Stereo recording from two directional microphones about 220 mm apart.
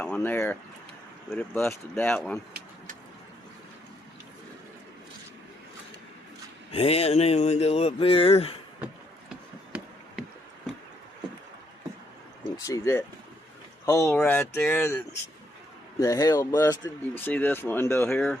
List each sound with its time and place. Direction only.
0.0 s speech: 5° left (ahead or behind)
6.7 s speech: 25° left (ahead or behind)
12.5 s speech: 15° left (ahead or behind)